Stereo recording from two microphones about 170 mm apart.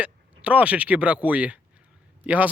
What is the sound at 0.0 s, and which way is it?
Speech, 10° right (ahead or behind).